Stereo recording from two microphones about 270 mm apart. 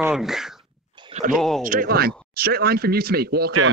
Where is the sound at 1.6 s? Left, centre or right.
Right.